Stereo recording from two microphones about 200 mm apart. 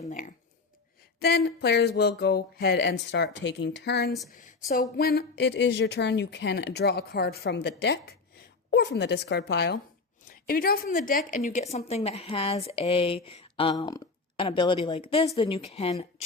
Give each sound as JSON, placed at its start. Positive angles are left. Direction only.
{"t": 0.0, "sound": "a sound", "side_deg": 40}
{"t": 1.2, "sound": "speech", "side_deg": 55}
{"t": 4.7, "sound": "a woman's voice", "side_deg": 45}